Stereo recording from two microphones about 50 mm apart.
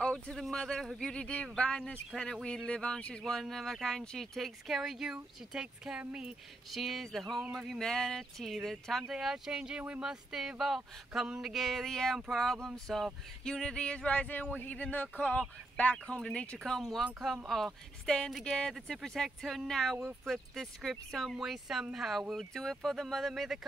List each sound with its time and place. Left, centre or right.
0.0 s speech: centre
3.3 s speech: centre
4.4 s speech: centre
6.7 s speech: centre
9.1 s speech: centre
10.0 s speech: centre
16.5 s speech: centre
21.4 s speech: centre
22.5 s speech: centre